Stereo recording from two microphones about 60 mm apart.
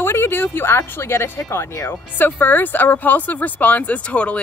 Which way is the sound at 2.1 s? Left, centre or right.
Left.